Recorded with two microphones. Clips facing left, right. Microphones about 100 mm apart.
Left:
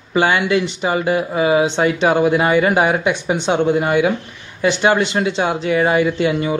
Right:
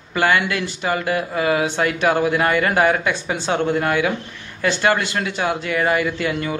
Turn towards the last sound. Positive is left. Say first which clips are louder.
# left 5 dB
turn(degrees=20)  # may be behind; listen again after turning